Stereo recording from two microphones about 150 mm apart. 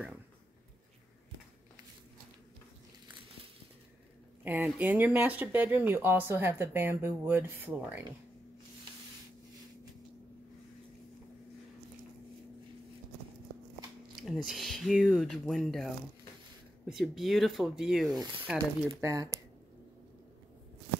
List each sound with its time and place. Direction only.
4.5 s speech: 10° right (ahead or behind)
14.2 s speech: centre (ahead or behind)
18.9 s speech: 20° right (ahead or behind)